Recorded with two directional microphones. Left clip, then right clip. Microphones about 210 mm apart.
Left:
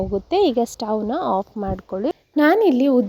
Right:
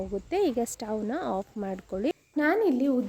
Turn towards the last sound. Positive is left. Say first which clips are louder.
# left 9 dB
turn(degrees=35)  # may be behind; listen again after turning